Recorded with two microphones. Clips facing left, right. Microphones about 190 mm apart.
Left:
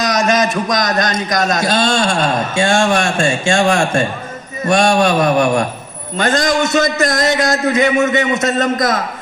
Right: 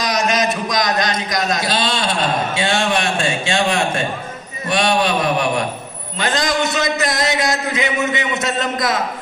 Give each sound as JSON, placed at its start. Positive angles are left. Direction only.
{"t": 0.0, "sound": "a man's voice", "side_deg": 45}